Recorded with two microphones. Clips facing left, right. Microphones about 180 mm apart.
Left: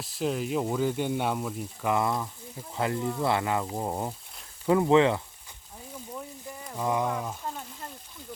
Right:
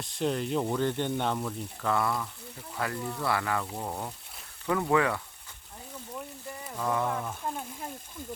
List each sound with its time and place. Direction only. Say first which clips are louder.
0.0 s speech: even; 5° left (ahead or behind); by 5.2 s 25° left (ahead or behind)
6.7 s speech: left 2 dB; 15° left (ahead or behind)
7.4 s a sound: right 2 dB; 10° right (ahead or behind)